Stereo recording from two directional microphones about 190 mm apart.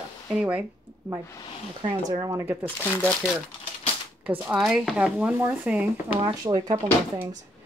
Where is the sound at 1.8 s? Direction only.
20° right (ahead or behind).